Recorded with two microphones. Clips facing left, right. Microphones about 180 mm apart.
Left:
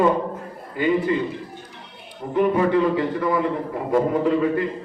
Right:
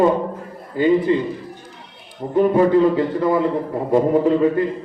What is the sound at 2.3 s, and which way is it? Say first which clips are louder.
A man's voice: right 4 dB; 30° right (ahead or behind).